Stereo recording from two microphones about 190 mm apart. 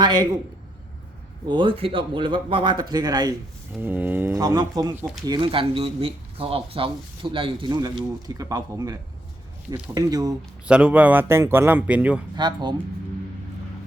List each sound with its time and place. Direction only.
0.0 s a man's voice: 20° right (ahead or behind)
1.5 s speech: 25° right (ahead or behind)
3.8 s speech: 10° right (ahead or behind)
10.7 s speech: 5° right (ahead or behind)
12.4 s speech: 20° right (ahead or behind)